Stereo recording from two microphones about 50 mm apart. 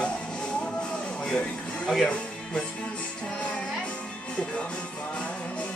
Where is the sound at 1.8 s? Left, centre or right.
Centre.